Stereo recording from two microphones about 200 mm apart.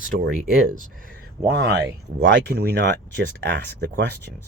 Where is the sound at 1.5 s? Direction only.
55° right (ahead or behind).